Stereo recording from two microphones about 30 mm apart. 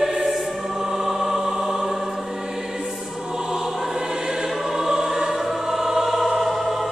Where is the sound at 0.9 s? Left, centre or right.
Centre.